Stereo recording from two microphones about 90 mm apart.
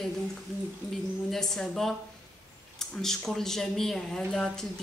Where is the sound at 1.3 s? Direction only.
5° left (ahead or behind).